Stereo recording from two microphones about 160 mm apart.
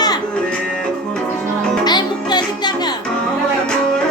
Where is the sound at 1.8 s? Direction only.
25° left (ahead or behind).